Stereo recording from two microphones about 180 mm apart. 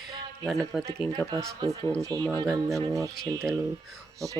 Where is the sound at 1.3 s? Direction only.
20° right (ahead or behind).